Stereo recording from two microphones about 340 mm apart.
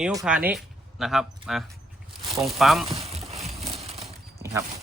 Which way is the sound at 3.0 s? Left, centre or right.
Centre.